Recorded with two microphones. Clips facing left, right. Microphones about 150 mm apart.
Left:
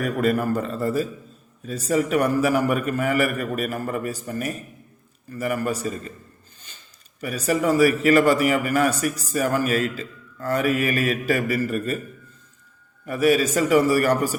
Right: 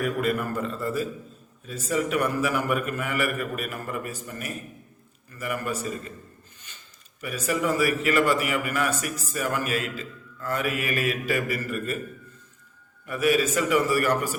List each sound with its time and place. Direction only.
0.0 s a man's voice: 40° left (ahead or behind)
7.2 s a man's voice: 40° left (ahead or behind)
13.1 s a man's voice: 35° left (ahead or behind)